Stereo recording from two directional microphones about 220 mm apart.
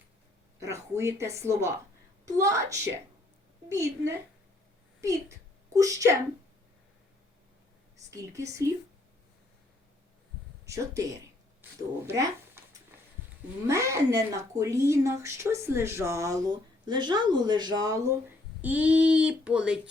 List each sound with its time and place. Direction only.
0.6 s speech: 15° right (ahead or behind)
5.7 s speech: 15° right (ahead or behind)
8.1 s speech: 15° right (ahead or behind)
10.7 s speech: 15° right (ahead or behind)
12.9 s a sound: 10° right (ahead or behind)
13.7 s speech: 15° right (ahead or behind)
18.6 s female singing: 5° right (ahead or behind)